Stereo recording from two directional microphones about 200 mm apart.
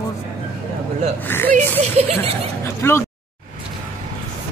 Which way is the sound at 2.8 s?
10° left (ahead or behind).